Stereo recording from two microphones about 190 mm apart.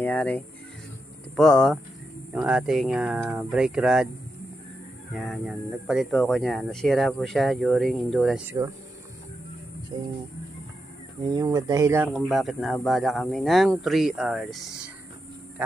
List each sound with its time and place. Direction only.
0.0 s speech: 10° left (ahead or behind)
5.1 s speech: centre (ahead or behind)
8.5 s speech: 15° right (ahead or behind)
9.9 s speech: 20° right (ahead or behind)
11.2 s speech: 20° right (ahead or behind)
12.2 s speech: centre (ahead or behind)